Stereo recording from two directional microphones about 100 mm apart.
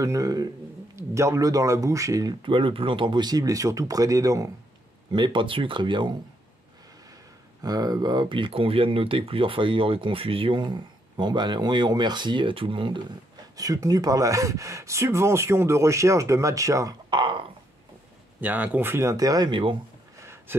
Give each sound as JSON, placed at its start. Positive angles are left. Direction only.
{"t": 0.0, "sound": "speech", "side_deg": -35}
{"t": 2.4, "sound": "speech", "side_deg": -60}
{"t": 5.1, "sound": "speech", "side_deg": -55}
{"t": 7.6, "sound": "speech", "side_deg": -40}
{"t": 13.6, "sound": "speech", "side_deg": -35}
{"t": 17.1, "sound": "speech", "side_deg": -55}
{"t": 18.4, "sound": "speech", "side_deg": -15}
{"t": 19.5, "sound": "speech", "side_deg": -55}
{"t": 20.2, "sound": "a sound", "side_deg": -25}